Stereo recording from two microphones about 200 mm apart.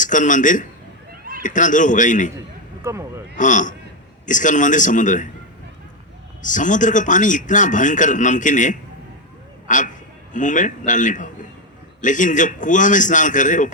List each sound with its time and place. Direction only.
0.0 s a man's voice: 40° left (ahead or behind)
2.8 s speech: 15° right (ahead or behind)
3.3 s a man's voice: 40° left (ahead or behind)
6.4 s a man's voice: 40° left (ahead or behind)